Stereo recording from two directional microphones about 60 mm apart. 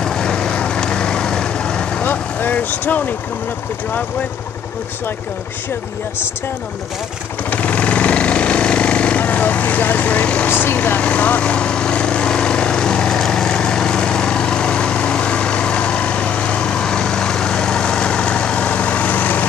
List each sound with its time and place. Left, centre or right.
0.0 s vehicle: centre
2.0 s vehicle: left
7.4 s vehicle: left
10.5 s speech: left
11.0 s vehicle: left